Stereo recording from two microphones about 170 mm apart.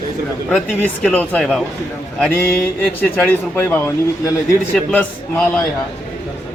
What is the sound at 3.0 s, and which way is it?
A man's voice, 10° left (ahead or behind).